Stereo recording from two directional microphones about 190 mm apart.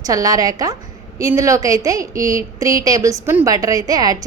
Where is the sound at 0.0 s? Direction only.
20° right (ahead or behind).